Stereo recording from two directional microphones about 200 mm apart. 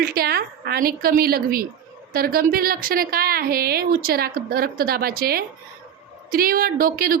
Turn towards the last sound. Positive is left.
turn(degrees=-45)  # may be behind; listen again after turning